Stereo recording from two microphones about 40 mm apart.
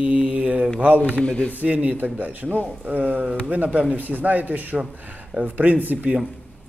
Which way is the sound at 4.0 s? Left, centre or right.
Right.